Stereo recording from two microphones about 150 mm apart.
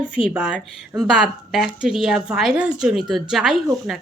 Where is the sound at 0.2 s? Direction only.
35° left (ahead or behind).